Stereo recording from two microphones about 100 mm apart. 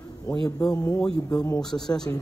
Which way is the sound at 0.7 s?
40° left (ahead or behind).